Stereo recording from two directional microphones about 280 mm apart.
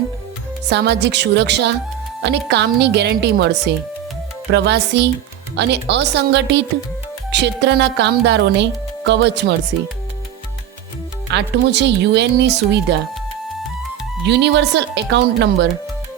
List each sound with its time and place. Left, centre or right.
0.7 s speech: right
11.3 s speech: right
14.3 s speech: right